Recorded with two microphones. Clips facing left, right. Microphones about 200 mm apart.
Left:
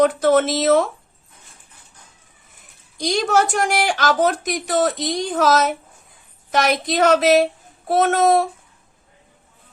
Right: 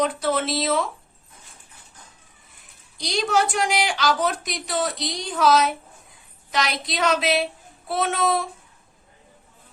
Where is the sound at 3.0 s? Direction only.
50° left (ahead or behind).